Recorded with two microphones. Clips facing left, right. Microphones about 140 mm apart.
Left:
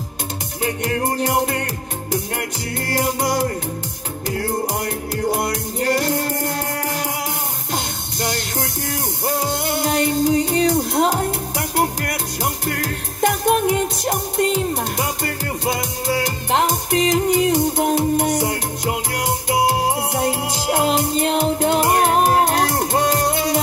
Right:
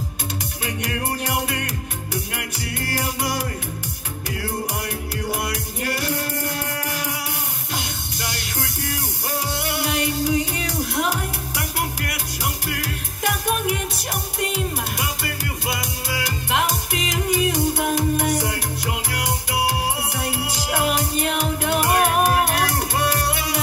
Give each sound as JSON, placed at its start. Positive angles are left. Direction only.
{"t": 0.7, "sound": "music", "side_deg": 35}
{"t": 3.0, "sound": "music", "side_deg": 35}
{"t": 5.3, "sound": "music", "side_deg": 35}
{"t": 8.8, "sound": "music", "side_deg": 40}
{"t": 11.0, "sound": "music", "side_deg": 35}
{"t": 18.5, "sound": "music", "side_deg": 35}